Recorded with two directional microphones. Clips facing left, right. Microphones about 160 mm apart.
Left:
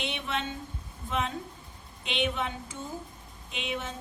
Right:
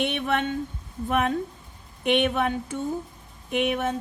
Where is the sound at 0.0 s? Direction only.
60° right (ahead or behind).